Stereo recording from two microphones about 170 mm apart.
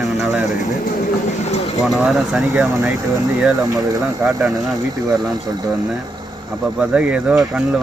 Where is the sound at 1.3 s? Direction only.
40° left (ahead or behind).